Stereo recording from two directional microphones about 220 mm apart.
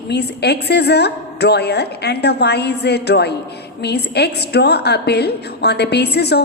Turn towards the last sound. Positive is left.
turn(degrees=50)  # may be behind; listen again after turning